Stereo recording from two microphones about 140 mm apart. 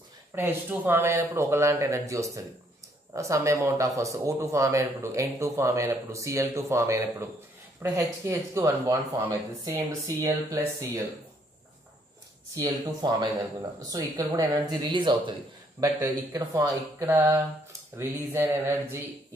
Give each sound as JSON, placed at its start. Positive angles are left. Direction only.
{"t": 0.3, "sound": "speech", "side_deg": -15}
{"t": 12.5, "sound": "speech", "side_deg": -25}
{"t": 15.8, "sound": "speech", "side_deg": -20}
{"t": 17.9, "sound": "mantra", "side_deg": -20}